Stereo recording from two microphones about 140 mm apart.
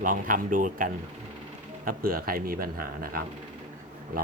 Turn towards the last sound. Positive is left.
turn(degrees=-90)